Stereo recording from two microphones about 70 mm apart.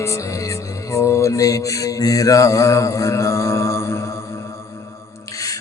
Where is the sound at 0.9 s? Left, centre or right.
Left.